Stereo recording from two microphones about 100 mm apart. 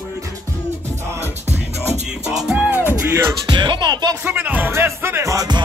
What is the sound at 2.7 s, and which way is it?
Music, 20° right (ahead or behind).